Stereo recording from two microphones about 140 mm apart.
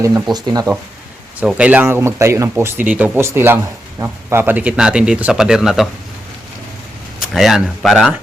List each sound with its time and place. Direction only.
0.3 s speech: 30° right (ahead or behind)
1.4 s speech: 10° right (ahead or behind)
7.2 s speech: centre (ahead or behind)